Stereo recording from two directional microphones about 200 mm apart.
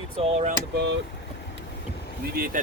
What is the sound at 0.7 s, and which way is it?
Speech, 60° right (ahead or behind).